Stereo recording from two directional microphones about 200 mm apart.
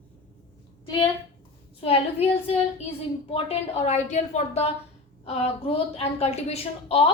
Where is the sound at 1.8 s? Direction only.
30° left (ahead or behind).